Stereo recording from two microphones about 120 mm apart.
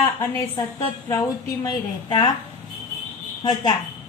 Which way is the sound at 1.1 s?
30° left (ahead or behind).